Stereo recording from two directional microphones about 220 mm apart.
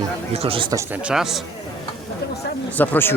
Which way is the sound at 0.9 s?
5° right (ahead or behind).